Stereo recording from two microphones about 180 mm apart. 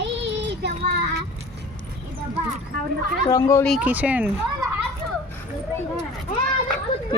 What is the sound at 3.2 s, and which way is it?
Speech, 20° left (ahead or behind).